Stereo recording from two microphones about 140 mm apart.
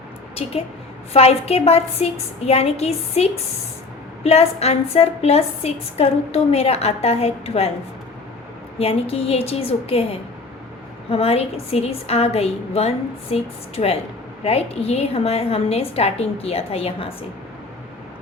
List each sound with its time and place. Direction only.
0.4 s a woman's voice: 45° left (ahead or behind)
8.8 s a woman's voice: 45° left (ahead or behind)